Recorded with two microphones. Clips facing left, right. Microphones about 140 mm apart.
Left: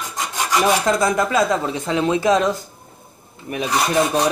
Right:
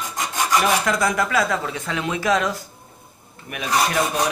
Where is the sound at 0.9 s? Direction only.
25° left (ahead or behind).